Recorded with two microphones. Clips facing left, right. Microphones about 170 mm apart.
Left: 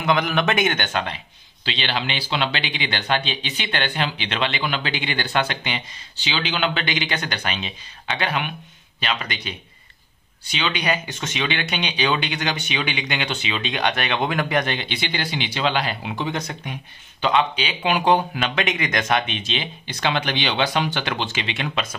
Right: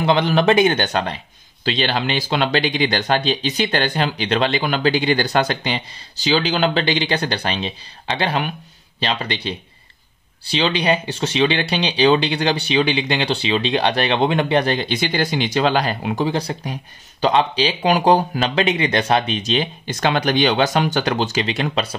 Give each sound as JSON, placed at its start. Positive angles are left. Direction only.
{"t": 0.0, "sound": "speech", "side_deg": -30}
{"t": 16.3, "sound": "speech", "side_deg": -35}